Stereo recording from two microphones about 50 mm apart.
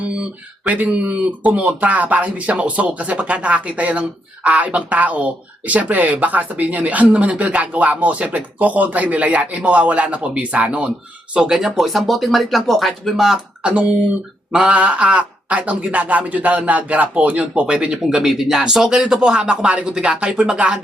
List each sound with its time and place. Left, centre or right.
0.7 s speech: right
11.3 s speech: centre
13.6 s speech: right
18.3 s speech: centre